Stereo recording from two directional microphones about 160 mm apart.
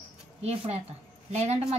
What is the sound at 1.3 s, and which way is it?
Speech, 40° right (ahead or behind).